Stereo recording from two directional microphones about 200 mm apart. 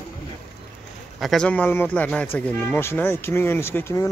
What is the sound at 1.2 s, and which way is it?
Speech, 5° left (ahead or behind).